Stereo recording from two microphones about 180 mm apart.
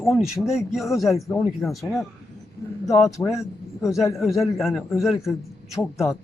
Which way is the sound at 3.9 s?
Centre (ahead or behind).